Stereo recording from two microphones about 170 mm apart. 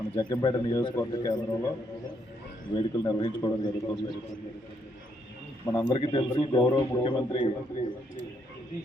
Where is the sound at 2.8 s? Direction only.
25° left (ahead or behind).